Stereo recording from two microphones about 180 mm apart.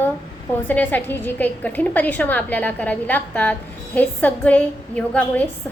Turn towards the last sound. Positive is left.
turn(degrees=10)  # may be behind; listen again after turning